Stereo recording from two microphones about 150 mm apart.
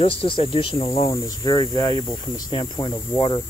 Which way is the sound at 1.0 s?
20° left (ahead or behind).